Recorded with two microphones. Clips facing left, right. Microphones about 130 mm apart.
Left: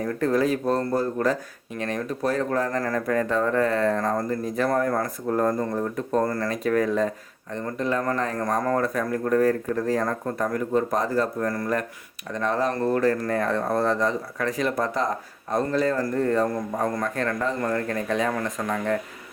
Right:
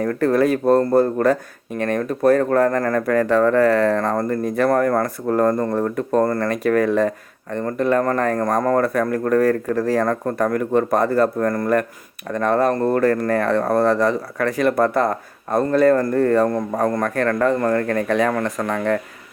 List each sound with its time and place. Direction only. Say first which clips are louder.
0.0 s speech: right 5 dB; 70° right (ahead or behind)